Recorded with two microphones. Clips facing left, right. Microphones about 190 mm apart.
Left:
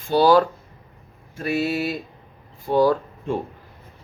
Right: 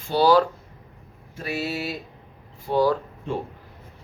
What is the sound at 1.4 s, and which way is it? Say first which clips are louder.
Speech: left 5 dB; 55° left (ahead or behind).